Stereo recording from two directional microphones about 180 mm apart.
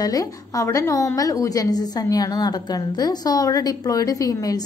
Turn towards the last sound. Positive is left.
turn(degrees=20)  # may be behind; listen again after turning